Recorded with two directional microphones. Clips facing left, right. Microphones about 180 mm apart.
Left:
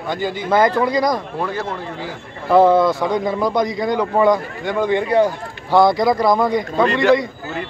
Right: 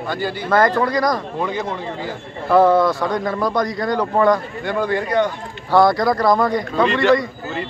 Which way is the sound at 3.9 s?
5° left (ahead or behind).